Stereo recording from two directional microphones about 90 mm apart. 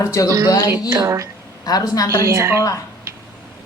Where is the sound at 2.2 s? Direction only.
30° right (ahead or behind).